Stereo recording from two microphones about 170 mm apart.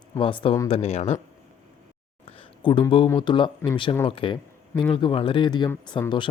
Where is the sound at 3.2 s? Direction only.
30° left (ahead or behind).